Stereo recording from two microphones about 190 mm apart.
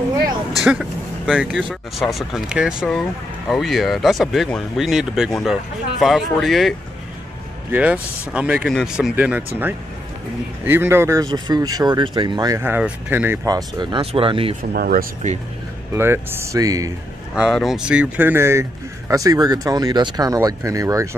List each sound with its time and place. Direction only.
0.7 s speech: 5° right (ahead or behind)
7.7 s speech: 10° right (ahead or behind)
10.6 s speech: 10° right (ahead or behind); by 14.5 s 30° right (ahead or behind)
14.6 s speech: 50° right (ahead or behind)
15.9 s speech: 10° right (ahead or behind)
17.4 s speech: centre (ahead or behind); by 21.2 s 15° right (ahead or behind)